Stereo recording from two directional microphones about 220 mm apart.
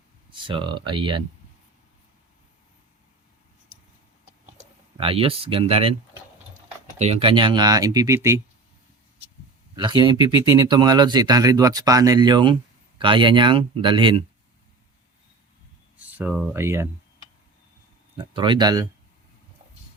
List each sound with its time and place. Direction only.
0.3 s speech: 20° right (ahead or behind)
4.5 s speech: 25° right (ahead or behind)
7.0 s speech: 25° right (ahead or behind)
9.7 s speech: 20° right (ahead or behind)
16.1 s speech: 5° right (ahead or behind)
18.2 s speech: 20° right (ahead or behind)